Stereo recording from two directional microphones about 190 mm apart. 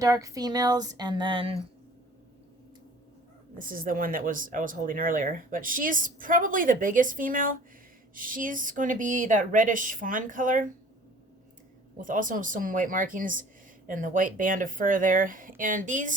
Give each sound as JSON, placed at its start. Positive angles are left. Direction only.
{"t": 0.0, "sound": "speech", "side_deg": -20}
{"t": 3.6, "sound": "speech", "side_deg": -45}
{"t": 11.9, "sound": "speech", "side_deg": -45}